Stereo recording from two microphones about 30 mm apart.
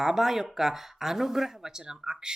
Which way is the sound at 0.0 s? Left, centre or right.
Centre.